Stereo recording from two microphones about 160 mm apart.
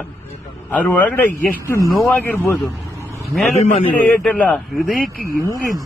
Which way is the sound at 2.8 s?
20° right (ahead or behind).